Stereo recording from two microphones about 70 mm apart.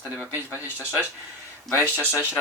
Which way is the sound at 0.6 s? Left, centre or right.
Left.